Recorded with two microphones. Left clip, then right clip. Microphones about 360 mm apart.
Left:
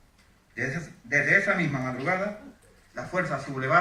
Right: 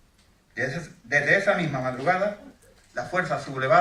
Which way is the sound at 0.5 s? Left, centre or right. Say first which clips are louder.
Right 2 dB; right.